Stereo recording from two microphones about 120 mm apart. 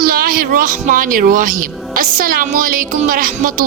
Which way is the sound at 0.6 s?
90° right.